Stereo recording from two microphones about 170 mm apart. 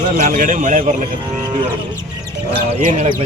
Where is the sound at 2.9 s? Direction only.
50° right (ahead or behind).